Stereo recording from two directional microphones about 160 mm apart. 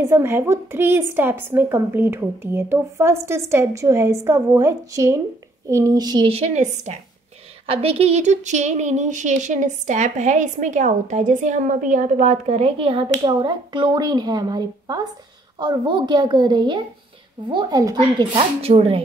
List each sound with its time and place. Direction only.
0.1 s a woman's voice: 15° right (ahead or behind); by 7.0 s 45° right (ahead or behind)
7.6 s a woman's voice: 35° right (ahead or behind)
18.3 s a woman's voice: 35° right (ahead or behind)